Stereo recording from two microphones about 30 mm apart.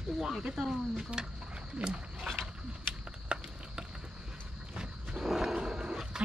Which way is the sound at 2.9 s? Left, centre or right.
Right.